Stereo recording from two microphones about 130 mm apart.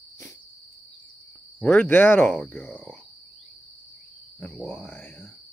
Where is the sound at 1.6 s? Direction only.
15° left (ahead or behind).